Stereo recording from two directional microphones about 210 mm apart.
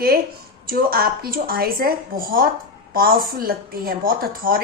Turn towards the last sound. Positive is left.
turn(degrees=-45)  # may be behind; listen again after turning